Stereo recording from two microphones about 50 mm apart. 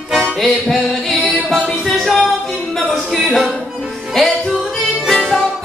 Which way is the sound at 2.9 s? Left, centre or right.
Centre.